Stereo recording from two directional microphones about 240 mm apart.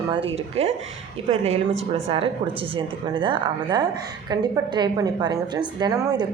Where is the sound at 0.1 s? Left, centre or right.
Right.